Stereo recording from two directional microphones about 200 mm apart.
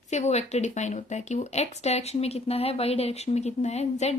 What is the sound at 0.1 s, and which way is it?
Speech, 35° left (ahead or behind).